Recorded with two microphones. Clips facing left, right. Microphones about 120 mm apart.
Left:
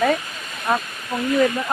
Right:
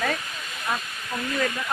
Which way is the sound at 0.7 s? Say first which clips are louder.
Left 8 dB; 55° left (ahead or behind).